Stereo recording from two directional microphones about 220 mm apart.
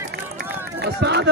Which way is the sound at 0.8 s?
50° right (ahead or behind).